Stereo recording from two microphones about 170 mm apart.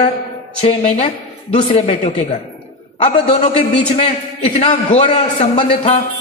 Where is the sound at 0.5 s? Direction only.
40° left (ahead or behind).